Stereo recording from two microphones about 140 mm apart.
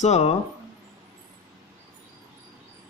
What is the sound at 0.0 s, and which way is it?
Speech, 50° left (ahead or behind).